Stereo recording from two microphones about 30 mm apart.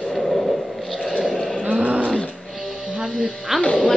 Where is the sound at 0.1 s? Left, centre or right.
Centre.